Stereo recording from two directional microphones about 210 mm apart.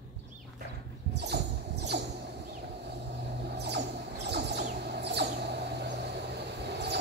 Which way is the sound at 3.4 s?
55° right (ahead or behind).